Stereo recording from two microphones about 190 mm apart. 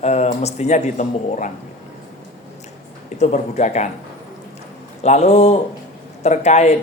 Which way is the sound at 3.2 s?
35° left (ahead or behind).